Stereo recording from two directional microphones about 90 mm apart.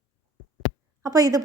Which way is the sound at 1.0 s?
40° right (ahead or behind).